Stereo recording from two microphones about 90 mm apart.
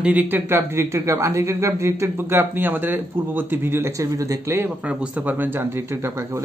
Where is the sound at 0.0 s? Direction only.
15° right (ahead or behind).